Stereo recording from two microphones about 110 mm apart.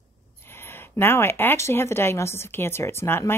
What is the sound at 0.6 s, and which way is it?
A woman's voice, 20° left (ahead or behind).